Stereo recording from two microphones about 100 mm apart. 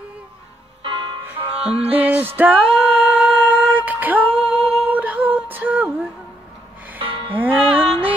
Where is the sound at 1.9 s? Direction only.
15° right (ahead or behind).